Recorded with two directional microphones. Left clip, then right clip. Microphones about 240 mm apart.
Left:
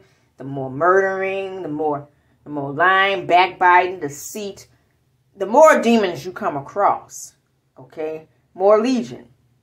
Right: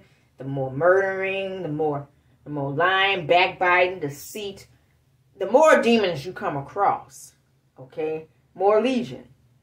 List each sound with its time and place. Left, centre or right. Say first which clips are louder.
0.4 s a woman's voice: left 3 dB; centre
8.5 s a woman's voice: left 5 dB; centre